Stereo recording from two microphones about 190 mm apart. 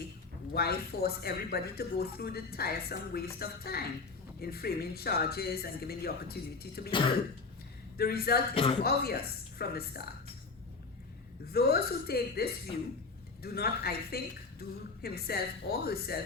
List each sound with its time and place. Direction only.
0.5 s a woman's voice: 55° left (ahead or behind)
6.9 s throat clearing: 25° left (ahead or behind)
7.9 s speech: 55° left (ahead or behind)
8.5 s throat clearing: 30° left (ahead or behind)
8.8 s speech: 55° left (ahead or behind)
11.5 s speech: 55° left (ahead or behind)